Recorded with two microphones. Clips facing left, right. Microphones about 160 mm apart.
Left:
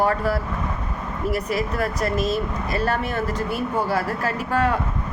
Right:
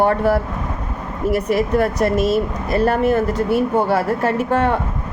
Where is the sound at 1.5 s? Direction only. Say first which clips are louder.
Right 7 dB; 25° right (ahead or behind).